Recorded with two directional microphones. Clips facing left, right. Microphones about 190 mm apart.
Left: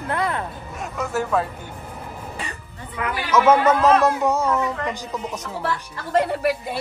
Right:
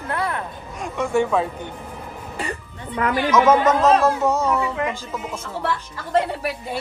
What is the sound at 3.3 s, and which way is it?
A man's voice, 10° left (ahead or behind).